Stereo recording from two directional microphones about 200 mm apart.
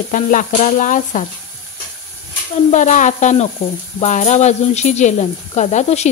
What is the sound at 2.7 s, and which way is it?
Speech, 40° left (ahead or behind).